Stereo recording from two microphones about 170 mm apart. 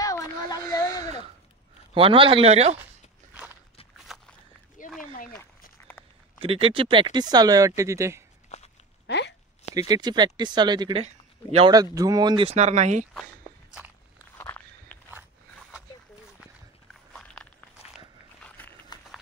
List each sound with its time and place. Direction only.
0.0 s a sound: 20° left (ahead or behind)
2.0 s speech: 30° right (ahead or behind)
4.1 s walk: centre (ahead or behind)
4.8 s a sound: 50° left (ahead or behind)
6.4 s speech: 35° right (ahead or behind); by 8.2 s 15° right (ahead or behind)
8.5 s walk: 40° left (ahead or behind)
9.0 s a sound: 90° left
9.8 s speech: 25° right (ahead or behind)
12.4 s speech: 40° right (ahead or behind)
14.3 s walk: 10° left (ahead or behind)
17.1 s walk: 5° left (ahead or behind)
18.9 s a sound: 25° left (ahead or behind)